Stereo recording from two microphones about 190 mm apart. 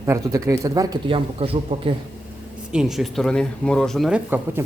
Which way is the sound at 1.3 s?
30° right (ahead or behind).